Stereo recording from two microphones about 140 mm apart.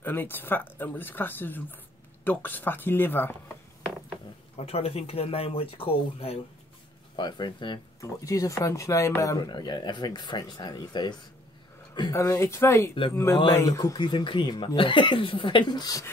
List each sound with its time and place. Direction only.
0.0 s speech: 15° left (ahead or behind)
4.6 s speech: 45° left (ahead or behind)
7.2 s speech: 30° left (ahead or behind)
8.0 s speech: 20° left (ahead or behind)